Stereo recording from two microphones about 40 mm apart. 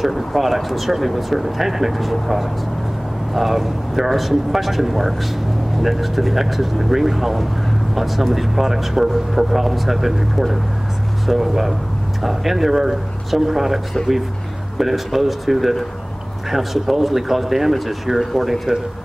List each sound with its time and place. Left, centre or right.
0.0 s speech: centre